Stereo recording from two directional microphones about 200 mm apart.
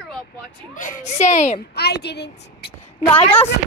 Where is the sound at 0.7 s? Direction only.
40° left (ahead or behind).